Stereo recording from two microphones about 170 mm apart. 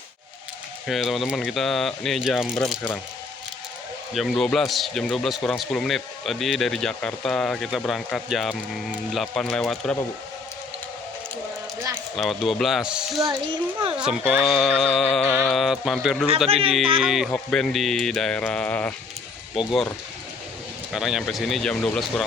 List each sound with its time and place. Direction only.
0.9 s speech: centre (ahead or behind)
4.1 s speech: centre (ahead or behind)
12.1 s speech: centre (ahead or behind)
13.1 s a child's voice: 20° right (ahead or behind)
13.9 s speech: 5° right (ahead or behind)
16.5 s speech: 35° right (ahead or behind)
17.0 s speech: centre (ahead or behind)
20.9 s speech: 5° right (ahead or behind)